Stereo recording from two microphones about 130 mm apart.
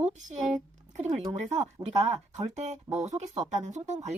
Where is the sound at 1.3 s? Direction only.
60° right (ahead or behind).